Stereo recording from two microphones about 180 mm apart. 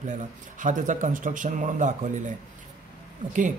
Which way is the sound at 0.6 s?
45° right (ahead or behind).